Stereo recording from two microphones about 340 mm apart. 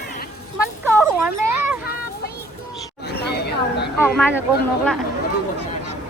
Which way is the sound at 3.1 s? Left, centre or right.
Left.